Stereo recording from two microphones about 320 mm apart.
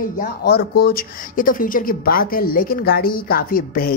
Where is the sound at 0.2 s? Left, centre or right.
Left.